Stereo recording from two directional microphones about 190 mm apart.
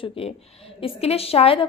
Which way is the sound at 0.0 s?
30° left (ahead or behind).